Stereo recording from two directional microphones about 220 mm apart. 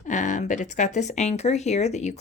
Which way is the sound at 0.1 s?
35° left (ahead or behind).